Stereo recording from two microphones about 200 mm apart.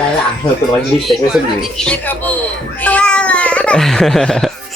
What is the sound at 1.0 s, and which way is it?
Speech, centre (ahead or behind).